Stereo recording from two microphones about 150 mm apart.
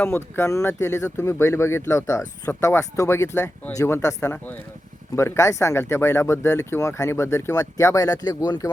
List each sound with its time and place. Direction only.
0.0 s speech: 15° left (ahead or behind)